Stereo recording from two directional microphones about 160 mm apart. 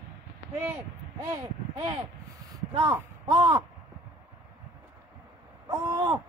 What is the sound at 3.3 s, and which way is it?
Speech, 25° right (ahead or behind).